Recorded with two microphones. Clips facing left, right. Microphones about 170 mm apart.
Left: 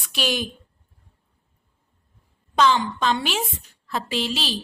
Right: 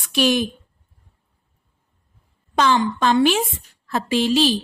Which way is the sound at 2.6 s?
50° right (ahead or behind).